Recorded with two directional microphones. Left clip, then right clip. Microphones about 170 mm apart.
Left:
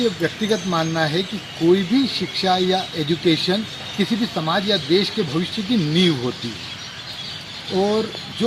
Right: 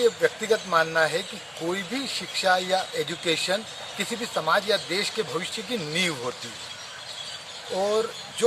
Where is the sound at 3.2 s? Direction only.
30° right (ahead or behind).